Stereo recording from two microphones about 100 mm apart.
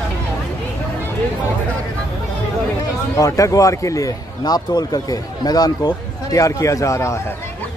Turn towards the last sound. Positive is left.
turn(degrees=30)  # may be behind; listen again after turning